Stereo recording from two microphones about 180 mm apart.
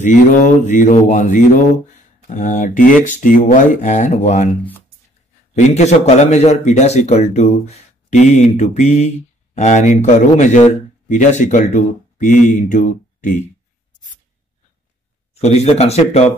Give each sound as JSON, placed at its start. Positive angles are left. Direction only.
{"t": 0.0, "sound": "speech", "side_deg": 45}
{"t": 5.5, "sound": "a man's voice", "side_deg": 40}
{"t": 15.4, "sound": "a man's voice", "side_deg": 35}